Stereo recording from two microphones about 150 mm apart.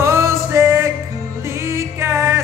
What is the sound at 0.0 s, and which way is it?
Music, 20° right (ahead or behind).